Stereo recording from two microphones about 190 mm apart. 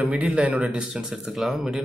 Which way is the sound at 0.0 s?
5° right (ahead or behind).